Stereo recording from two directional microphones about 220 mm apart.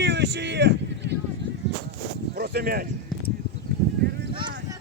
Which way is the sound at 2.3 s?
45° right (ahead or behind).